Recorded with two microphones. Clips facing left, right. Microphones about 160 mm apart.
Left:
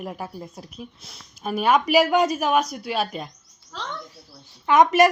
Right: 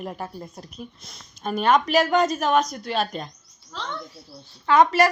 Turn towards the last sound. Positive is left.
turn(degrees=20)  # may be behind; listen again after turning